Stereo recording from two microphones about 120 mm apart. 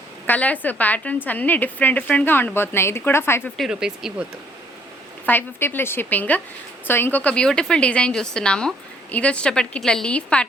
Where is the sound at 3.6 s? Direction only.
5° right (ahead or behind).